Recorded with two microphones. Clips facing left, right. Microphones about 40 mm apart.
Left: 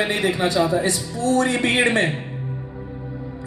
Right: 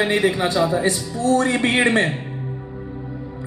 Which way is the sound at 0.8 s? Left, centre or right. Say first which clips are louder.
Right 2 dB; right.